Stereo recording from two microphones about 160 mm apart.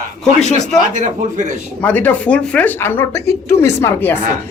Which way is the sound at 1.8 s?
10° left (ahead or behind).